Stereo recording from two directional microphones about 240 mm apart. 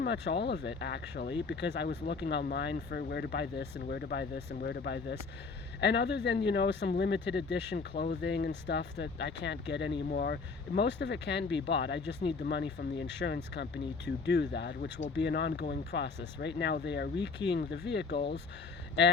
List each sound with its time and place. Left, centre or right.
0.0 s speech: left